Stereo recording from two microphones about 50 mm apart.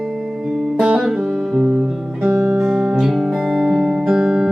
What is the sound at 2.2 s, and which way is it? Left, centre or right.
Music, right.